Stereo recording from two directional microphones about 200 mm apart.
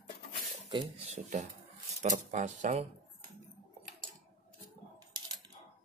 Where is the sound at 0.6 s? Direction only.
30° right (ahead or behind).